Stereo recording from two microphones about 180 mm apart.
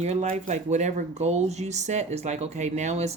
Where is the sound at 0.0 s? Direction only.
40° right (ahead or behind).